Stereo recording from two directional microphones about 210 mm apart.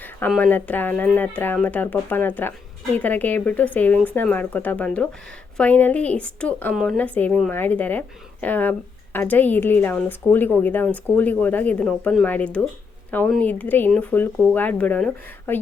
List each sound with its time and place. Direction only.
0.0 s a woman's voice: 5° left (ahead or behind)